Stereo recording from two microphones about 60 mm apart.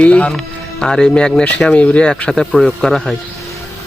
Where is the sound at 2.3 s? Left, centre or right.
Centre.